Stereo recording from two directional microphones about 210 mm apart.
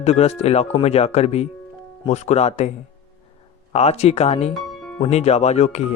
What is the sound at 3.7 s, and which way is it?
Speech, 30° left (ahead or behind).